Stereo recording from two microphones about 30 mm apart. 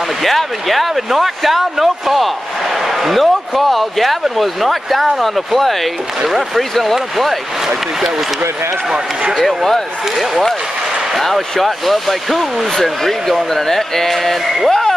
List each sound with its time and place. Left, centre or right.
0.2 s a man's voice: centre
6.2 s a man's voice: centre
6.7 s speech: centre
9.4 s speech: centre
11.1 s speech: centre
14.7 s a sound: centre